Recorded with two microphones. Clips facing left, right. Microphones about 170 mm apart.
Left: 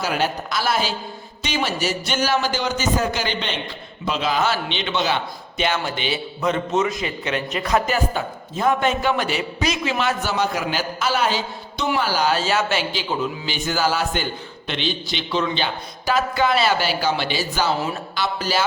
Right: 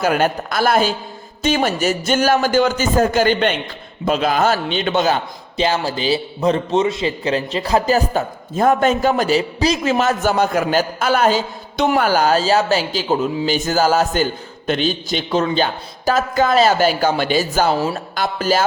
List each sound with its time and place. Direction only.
0.0 s a man's voice: 50° right (ahead or behind)
5.5 s a man's voice: 35° right (ahead or behind)